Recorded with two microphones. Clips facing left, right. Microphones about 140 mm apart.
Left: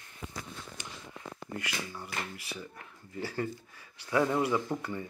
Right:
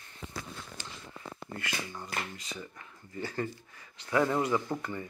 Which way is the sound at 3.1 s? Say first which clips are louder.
Even; 10° left (ahead or behind).